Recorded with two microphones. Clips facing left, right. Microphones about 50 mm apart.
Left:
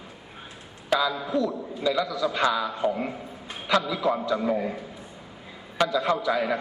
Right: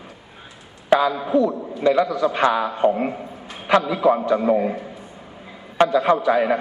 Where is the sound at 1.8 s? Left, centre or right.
Right.